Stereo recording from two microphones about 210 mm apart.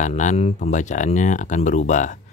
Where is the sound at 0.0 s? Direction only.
35° left (ahead or behind).